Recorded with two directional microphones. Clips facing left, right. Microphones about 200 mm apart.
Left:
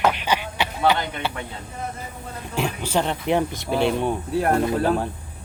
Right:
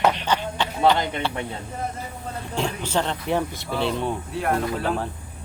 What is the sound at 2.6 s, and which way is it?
Speech, 10° left (ahead or behind).